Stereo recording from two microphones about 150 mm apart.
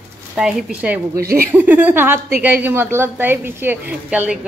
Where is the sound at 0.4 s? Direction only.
5° right (ahead or behind).